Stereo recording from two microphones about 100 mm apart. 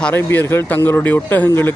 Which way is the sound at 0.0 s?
25° left (ahead or behind).